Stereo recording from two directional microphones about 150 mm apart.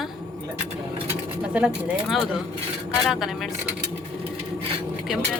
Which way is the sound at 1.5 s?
5° right (ahead or behind).